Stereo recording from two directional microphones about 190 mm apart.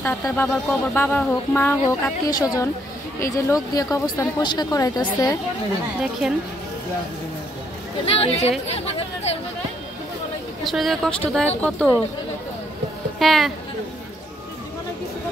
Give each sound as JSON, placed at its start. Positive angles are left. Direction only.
{"t": 0.0, "sound": "speech", "side_deg": 10}
{"t": 8.0, "sound": "speech", "side_deg": 30}
{"t": 10.6, "sound": "speech", "side_deg": 0}
{"t": 13.2, "sound": "speech", "side_deg": 0}